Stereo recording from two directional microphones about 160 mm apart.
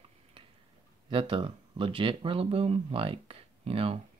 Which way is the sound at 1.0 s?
30° right (ahead or behind).